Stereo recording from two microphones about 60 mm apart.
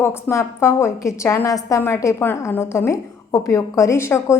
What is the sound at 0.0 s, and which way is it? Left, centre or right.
A woman's voice, left.